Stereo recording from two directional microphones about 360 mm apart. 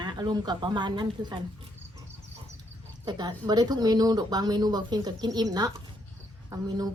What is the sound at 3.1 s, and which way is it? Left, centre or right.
A woman's voice, centre.